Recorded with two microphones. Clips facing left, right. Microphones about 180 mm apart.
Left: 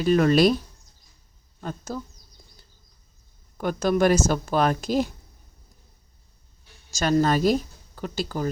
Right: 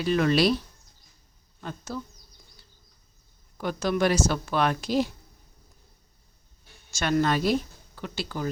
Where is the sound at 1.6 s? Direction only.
45° left (ahead or behind).